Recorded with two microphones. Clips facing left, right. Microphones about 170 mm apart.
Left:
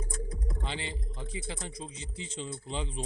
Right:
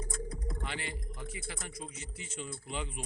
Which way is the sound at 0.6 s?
25° left (ahead or behind).